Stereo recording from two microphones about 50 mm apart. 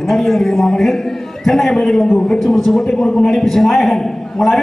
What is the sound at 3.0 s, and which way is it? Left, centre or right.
Speech, centre.